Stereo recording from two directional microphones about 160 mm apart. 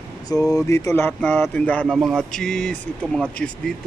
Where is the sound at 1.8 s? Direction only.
Centre (ahead or behind).